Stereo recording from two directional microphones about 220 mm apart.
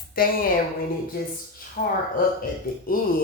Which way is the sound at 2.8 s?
40° left (ahead or behind).